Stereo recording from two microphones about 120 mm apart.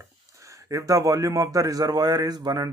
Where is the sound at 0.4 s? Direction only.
25° right (ahead or behind).